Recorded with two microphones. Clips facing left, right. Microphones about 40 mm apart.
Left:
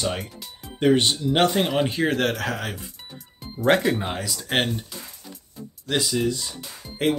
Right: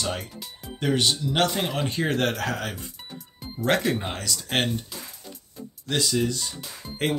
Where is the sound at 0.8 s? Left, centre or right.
Left.